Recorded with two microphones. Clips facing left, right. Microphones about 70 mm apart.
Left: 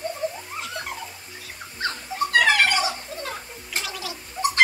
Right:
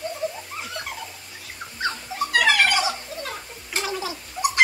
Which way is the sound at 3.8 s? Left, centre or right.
Right.